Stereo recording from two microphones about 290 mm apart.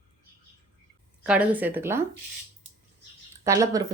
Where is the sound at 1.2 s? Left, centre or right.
Centre.